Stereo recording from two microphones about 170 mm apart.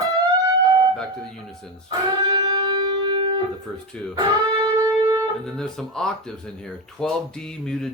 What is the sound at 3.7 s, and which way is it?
Speech, 5° left (ahead or behind).